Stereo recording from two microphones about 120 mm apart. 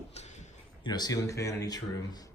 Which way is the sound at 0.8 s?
35° left (ahead or behind).